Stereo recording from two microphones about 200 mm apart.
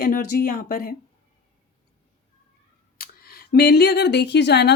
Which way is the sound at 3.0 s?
50° left (ahead or behind).